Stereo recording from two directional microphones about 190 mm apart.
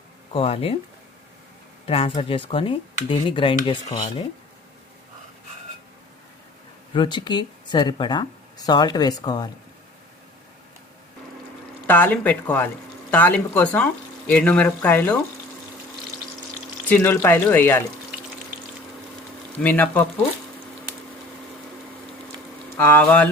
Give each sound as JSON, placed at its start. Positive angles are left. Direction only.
{"t": 0.3, "sound": "speech", "side_deg": 30}
{"t": 1.9, "sound": "speech", "side_deg": 30}
{"t": 6.9, "sound": "speech", "side_deg": 25}
{"t": 11.9, "sound": "speech", "side_deg": 10}
{"t": 16.9, "sound": "speech", "side_deg": 10}
{"t": 19.6, "sound": "speech", "side_deg": 10}
{"t": 22.8, "sound": "speech", "side_deg": 10}